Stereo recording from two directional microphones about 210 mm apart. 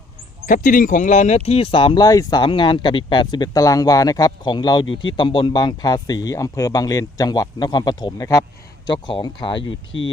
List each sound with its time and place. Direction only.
0.4 s speech: 40° left (ahead or behind); by 9.6 s 20° left (ahead or behind)